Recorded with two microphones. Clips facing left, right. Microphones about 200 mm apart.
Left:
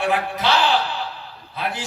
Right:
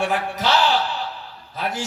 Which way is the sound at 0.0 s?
45° right (ahead or behind).